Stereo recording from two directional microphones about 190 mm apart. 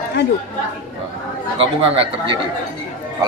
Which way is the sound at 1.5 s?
30° right (ahead or behind).